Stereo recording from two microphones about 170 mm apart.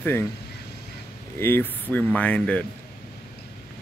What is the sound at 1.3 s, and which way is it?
Speech, 15° left (ahead or behind).